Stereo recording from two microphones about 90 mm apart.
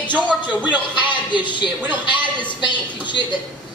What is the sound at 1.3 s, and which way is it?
Speech, 60° left (ahead or behind).